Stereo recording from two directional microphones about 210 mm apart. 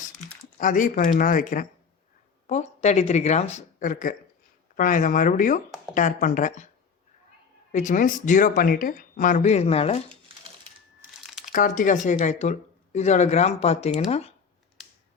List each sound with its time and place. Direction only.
0.6 s speech: 40° left (ahead or behind)
7.7 s speech: 35° left (ahead or behind)
11.5 s speech: 40° left (ahead or behind)